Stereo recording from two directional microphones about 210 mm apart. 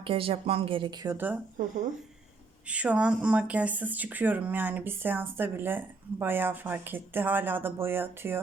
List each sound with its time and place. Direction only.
0.0 s a woman's voice: 25° right (ahead or behind)
1.1 s speech: 10° right (ahead or behind)
2.6 s speech: 5° right (ahead or behind)